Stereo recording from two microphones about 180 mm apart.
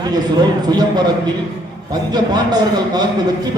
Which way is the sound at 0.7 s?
20° right (ahead or behind).